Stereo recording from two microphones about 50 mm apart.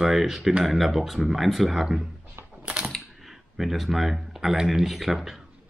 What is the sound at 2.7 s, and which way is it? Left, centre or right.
Typing, right.